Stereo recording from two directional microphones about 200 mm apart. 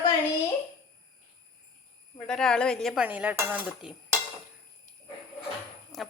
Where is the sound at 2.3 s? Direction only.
5° left (ahead or behind).